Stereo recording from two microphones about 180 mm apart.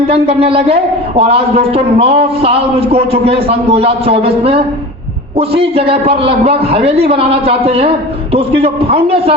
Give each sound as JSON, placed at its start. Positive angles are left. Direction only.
{"t": 0.1, "sound": "a man's voice", "side_deg": -35}